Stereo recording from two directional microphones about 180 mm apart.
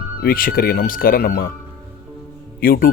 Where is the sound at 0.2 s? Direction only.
55° left (ahead or behind).